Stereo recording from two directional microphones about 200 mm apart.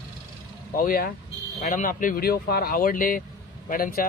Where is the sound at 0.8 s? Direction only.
45° left (ahead or behind).